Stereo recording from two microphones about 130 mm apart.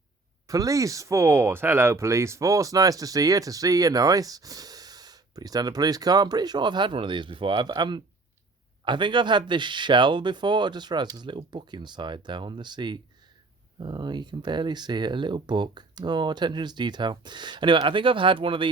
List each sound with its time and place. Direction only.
0.4 s speech: 25° right (ahead or behind)